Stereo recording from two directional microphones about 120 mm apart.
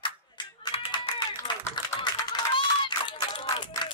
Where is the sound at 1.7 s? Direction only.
40° left (ahead or behind).